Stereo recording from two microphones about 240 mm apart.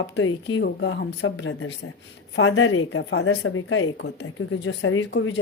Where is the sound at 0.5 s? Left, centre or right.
Left.